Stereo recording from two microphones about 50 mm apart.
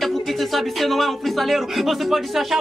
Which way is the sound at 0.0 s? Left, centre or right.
Centre.